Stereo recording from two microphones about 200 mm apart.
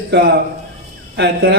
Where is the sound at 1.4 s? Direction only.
50° right (ahead or behind).